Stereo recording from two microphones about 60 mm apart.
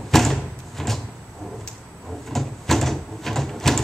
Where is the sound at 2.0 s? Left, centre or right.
Centre.